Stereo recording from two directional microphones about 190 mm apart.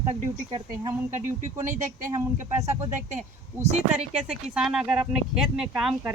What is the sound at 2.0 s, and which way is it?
Speech, 15° right (ahead or behind).